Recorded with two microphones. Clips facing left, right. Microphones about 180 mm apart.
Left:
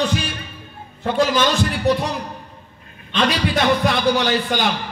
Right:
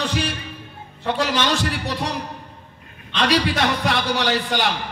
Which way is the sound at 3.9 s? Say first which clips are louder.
Left 3 dB; 75° right (ahead or behind).